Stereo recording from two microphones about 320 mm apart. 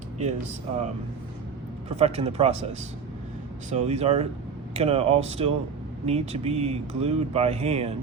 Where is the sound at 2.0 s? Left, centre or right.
Centre.